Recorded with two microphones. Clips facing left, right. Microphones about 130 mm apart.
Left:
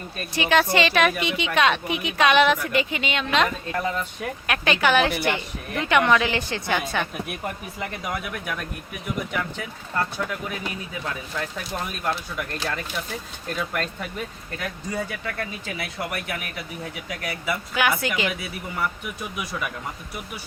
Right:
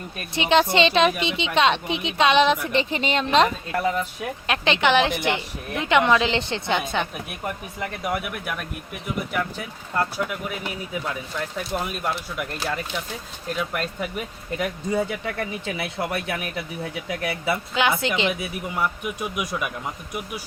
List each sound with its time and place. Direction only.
0.3 s speech: 20° right (ahead or behind)
3.7 s speech: 10° right (ahead or behind)
4.4 s speech: 25° right (ahead or behind)
7.8 s speech: 5° right (ahead or behind)
10.0 s speech: 10° right (ahead or behind)
13.7 s speech: 5° right (ahead or behind)
14.5 s speech: 20° right (ahead or behind)